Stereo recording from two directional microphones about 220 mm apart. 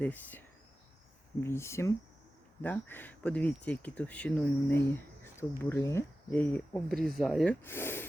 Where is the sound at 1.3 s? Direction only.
10° left (ahead or behind).